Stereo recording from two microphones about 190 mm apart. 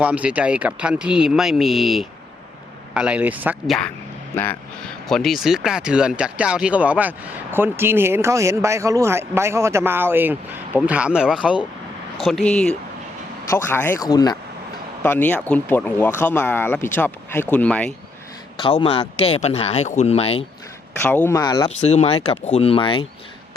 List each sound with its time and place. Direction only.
0.0 s a man's voice: 5° right (ahead or behind)
5.0 s a man's voice: centre (ahead or behind)
18.6 s speech: 30° left (ahead or behind)
21.2 s speech: 20° left (ahead or behind)
21.8 s speech: 35° left (ahead or behind)